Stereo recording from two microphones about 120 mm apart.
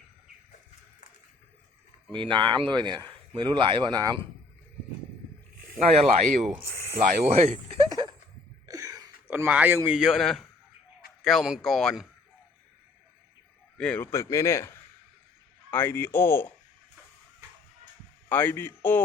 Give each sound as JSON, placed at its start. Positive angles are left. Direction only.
{"t": 2.1, "sound": "speech", "side_deg": -45}
{"t": 5.9, "sound": "speech", "side_deg": -60}
{"t": 7.9, "sound": "a sound", "side_deg": -35}
{"t": 9.3, "sound": "a man's voice", "side_deg": -15}
{"t": 13.7, "sound": "speech", "side_deg": 10}
{"t": 14.1, "sound": "speech", "side_deg": 25}
{"t": 18.3, "sound": "a man's voice", "side_deg": 15}